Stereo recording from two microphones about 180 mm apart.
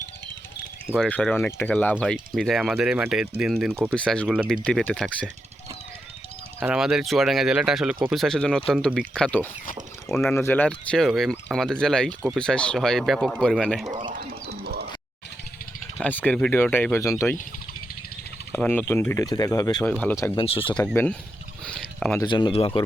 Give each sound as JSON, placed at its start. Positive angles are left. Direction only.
{"t": 0.9, "sound": "speech", "side_deg": 5}
{"t": 6.6, "sound": "speech", "side_deg": -5}
{"t": 10.3, "sound": "speech", "side_deg": 10}
{"t": 14.5, "sound": "a sound", "side_deg": -60}
{"t": 16.0, "sound": "speech", "side_deg": 10}
{"t": 18.5, "sound": "speech", "side_deg": 10}
{"t": 20.3, "sound": "speech", "side_deg": 30}
{"t": 20.8, "sound": "speech", "side_deg": 10}
{"t": 21.6, "sound": "a sound", "side_deg": 5}
{"t": 22.2, "sound": "speech", "side_deg": 25}